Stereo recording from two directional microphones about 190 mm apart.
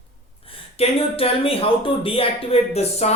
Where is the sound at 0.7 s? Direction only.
30° left (ahead or behind).